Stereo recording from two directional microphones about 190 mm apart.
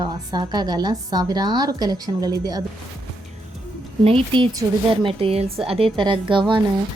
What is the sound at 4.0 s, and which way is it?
A woman's voice, 30° right (ahead or behind).